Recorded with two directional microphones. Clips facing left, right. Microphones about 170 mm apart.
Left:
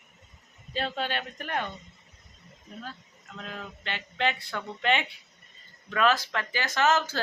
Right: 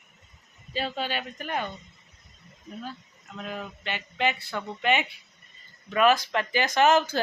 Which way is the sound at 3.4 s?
10° right (ahead or behind).